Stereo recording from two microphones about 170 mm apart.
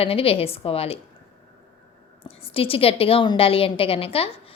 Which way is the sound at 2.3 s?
35° left (ahead or behind).